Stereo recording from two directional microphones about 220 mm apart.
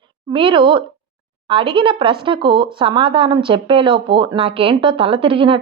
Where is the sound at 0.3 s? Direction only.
25° right (ahead or behind).